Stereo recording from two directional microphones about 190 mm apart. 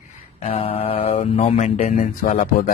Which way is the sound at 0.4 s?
35° left (ahead or behind).